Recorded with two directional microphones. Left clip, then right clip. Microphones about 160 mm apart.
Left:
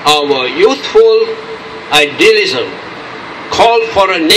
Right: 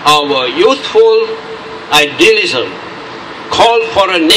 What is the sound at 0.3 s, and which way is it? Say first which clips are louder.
A man's voice: even; 20° left (ahead or behind).